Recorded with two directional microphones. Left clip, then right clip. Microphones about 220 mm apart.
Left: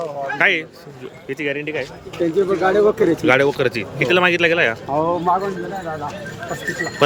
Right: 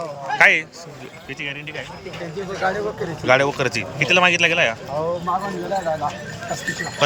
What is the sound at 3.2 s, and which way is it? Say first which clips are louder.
Speech: right 2 dB; 10° left (ahead or behind).